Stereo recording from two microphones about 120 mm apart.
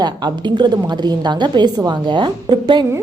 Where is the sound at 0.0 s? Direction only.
40° right (ahead or behind).